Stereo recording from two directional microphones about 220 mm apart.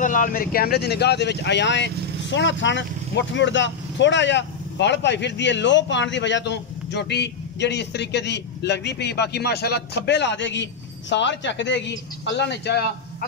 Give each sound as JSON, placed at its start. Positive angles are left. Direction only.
{"t": 0.0, "sound": "speech", "side_deg": 35}